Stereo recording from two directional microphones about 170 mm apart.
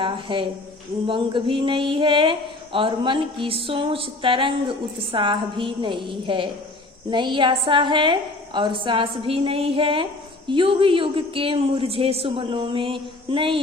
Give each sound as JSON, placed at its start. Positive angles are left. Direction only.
{"t": 0.0, "sound": "a woman's voice", "side_deg": -30}